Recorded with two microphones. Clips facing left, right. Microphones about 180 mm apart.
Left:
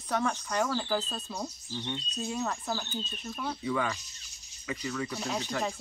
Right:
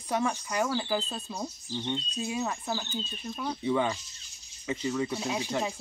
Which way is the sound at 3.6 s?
25° right (ahead or behind).